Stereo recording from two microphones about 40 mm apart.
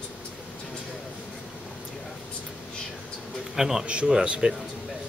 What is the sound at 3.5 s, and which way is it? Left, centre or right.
Speech, centre.